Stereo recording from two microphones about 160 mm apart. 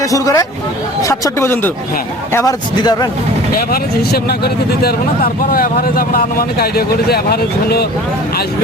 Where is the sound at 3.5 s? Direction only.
70° left (ahead or behind).